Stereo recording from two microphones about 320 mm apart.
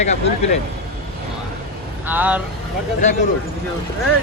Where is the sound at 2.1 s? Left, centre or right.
Centre.